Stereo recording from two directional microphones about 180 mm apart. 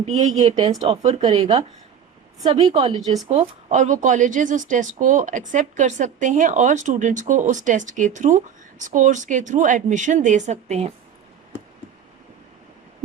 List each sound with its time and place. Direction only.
0.1 s a woman's voice: 30° right (ahead or behind)
3.7 s speech: 40° right (ahead or behind)